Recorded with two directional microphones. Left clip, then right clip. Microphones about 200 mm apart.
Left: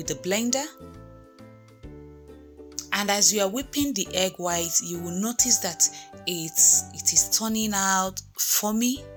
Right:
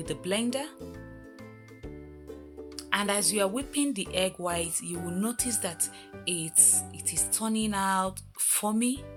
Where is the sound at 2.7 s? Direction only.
10° left (ahead or behind).